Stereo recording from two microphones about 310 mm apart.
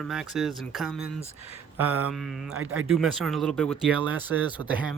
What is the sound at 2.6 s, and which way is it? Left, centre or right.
Speech, right.